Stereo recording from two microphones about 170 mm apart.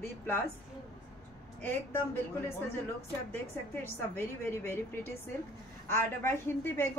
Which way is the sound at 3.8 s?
15° left (ahead or behind).